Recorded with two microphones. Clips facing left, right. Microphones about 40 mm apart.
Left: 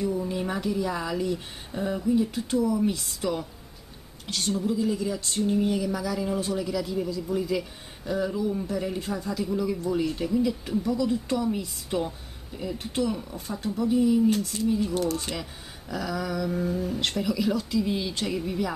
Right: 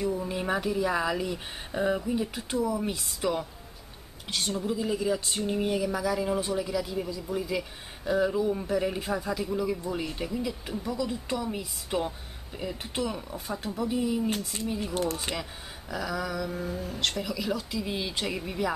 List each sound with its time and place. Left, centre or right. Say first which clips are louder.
0.0 s a man's voice: left 2 dB; centre
14.5 s speech: left 6 dB; right
15.3 s a man's voice: even; centre